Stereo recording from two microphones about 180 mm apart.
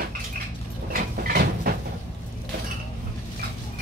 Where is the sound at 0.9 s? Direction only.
55° right (ahead or behind).